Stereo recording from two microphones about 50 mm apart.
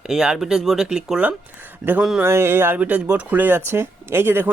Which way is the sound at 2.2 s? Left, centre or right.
Right.